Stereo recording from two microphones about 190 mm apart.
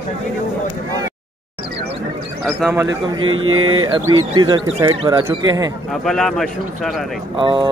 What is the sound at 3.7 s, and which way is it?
Speech, 20° right (ahead or behind).